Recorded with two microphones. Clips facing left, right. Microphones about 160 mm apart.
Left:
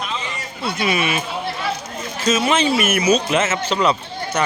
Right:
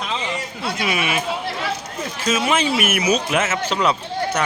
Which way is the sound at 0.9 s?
5° right (ahead or behind).